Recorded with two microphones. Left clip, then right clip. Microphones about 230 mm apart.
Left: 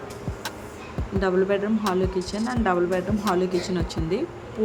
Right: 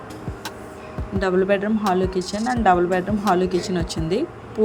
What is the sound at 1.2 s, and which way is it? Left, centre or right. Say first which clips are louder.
Speech: right 3 dB; centre.